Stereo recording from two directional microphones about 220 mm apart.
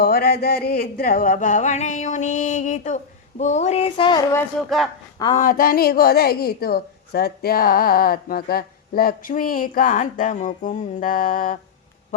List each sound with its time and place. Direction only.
0.0 s a woman's voice: 45° left (ahead or behind); by 4.4 s 15° left (ahead or behind)
5.4 s a woman's voice: 40° left (ahead or behind)